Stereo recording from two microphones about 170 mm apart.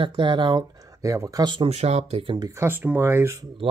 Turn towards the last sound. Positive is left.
turn(degrees=-15)  # may be behind; listen again after turning